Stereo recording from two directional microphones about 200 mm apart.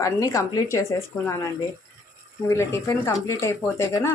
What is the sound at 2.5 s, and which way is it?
A woman's voice, 15° left (ahead or behind).